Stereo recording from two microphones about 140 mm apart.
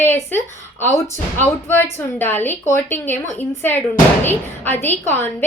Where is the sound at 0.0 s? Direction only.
15° left (ahead or behind).